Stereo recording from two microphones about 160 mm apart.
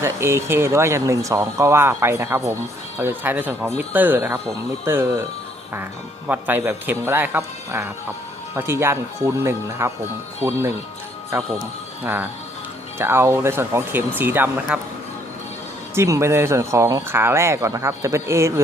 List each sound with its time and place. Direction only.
0.0 s speech: 15° right (ahead or behind)
6.2 s speech: 10° right (ahead or behind)
12.0 s speech: 10° right (ahead or behind)
16.0 s speech: 20° right (ahead or behind)